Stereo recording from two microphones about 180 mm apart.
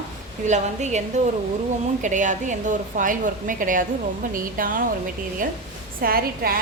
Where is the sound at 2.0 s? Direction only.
45° right (ahead or behind).